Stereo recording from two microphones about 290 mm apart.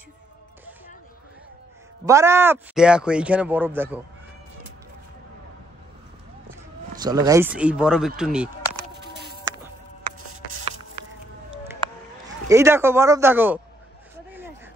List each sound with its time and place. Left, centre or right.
2.0 s speech: centre
7.0 s speech: centre
9.1 s music: right
12.4 s speech: centre
14.1 s a sound: centre